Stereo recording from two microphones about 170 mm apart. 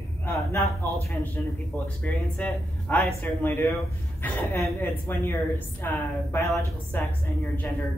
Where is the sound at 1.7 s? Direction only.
10° left (ahead or behind).